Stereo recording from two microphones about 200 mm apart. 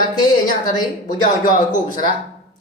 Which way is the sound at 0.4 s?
40° left (ahead or behind).